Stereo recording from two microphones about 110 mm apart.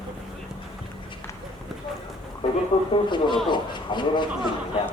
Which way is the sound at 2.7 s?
50° left (ahead or behind).